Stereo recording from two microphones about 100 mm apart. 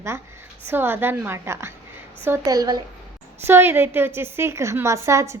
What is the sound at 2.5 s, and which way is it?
Speech, 45° right (ahead or behind).